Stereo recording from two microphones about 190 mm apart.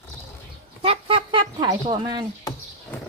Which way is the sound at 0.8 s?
30° right (ahead or behind).